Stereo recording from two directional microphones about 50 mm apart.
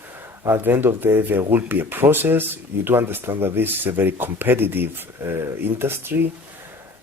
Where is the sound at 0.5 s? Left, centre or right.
Right.